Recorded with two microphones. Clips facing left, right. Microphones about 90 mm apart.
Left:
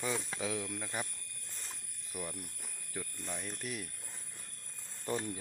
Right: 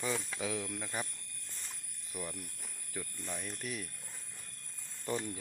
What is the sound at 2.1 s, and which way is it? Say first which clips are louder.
Speech: even; 10° left (ahead or behind).